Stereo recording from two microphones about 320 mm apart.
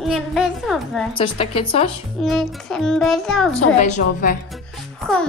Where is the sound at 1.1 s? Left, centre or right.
Centre.